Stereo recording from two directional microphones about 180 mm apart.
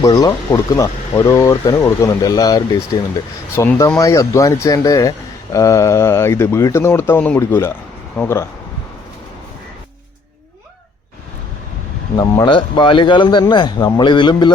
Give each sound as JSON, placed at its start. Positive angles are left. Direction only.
{"t": 0.0, "sound": "speech", "side_deg": 20}
{"t": 12.1, "sound": "speech", "side_deg": 25}